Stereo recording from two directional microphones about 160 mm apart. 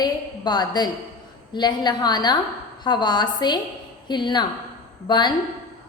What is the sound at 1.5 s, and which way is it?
A woman's voice, 25° left (ahead or behind).